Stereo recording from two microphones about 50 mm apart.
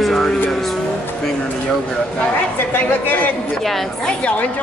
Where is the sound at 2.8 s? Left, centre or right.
Left.